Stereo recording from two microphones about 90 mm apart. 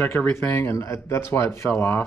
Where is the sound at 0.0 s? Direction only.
25° left (ahead or behind).